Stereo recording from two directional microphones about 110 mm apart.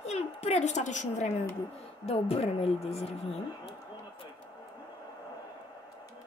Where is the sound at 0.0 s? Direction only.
75° left (ahead or behind); by 1.3 s 90° left.